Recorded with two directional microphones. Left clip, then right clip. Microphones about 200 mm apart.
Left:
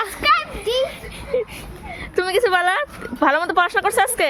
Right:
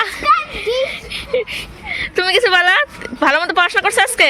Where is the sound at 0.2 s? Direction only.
20° left (ahead or behind).